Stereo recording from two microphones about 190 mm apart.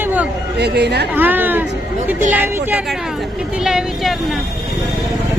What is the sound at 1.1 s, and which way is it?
Speech, 10° right (ahead or behind).